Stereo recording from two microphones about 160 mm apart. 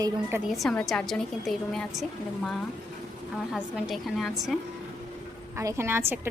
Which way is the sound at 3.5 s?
5° right (ahead or behind).